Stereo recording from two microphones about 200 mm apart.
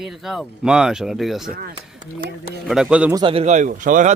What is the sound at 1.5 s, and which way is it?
Speech, 50° right (ahead or behind).